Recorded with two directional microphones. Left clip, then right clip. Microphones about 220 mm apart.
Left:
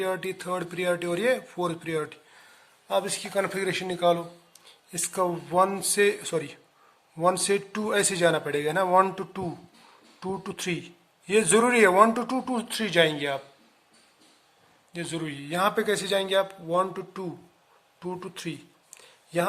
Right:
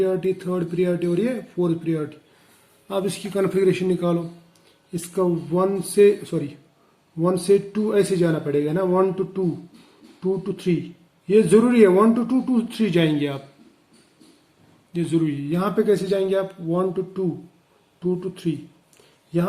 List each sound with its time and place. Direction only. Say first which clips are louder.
0.0 s a man's voice: right 7 dB; 30° left (ahead or behind)
2.8 s a man's voice: right 1 dB; 20° left (ahead or behind)
14.9 s a man's voice: right 10 dB; 20° left (ahead or behind); by 18.5 s 35° left (ahead or behind)